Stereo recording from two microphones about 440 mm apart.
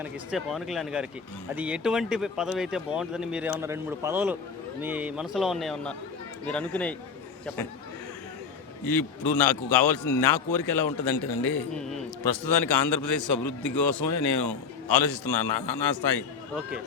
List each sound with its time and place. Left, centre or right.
0.0 s speech: centre
8.9 s a man's voice: left
14.8 s speech: centre